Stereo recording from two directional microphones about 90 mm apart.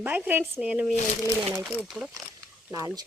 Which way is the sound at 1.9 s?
Centre (ahead or behind).